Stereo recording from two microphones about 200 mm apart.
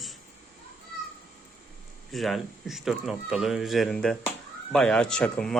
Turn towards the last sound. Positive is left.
turn(degrees=5)  # may be behind; listen again after turning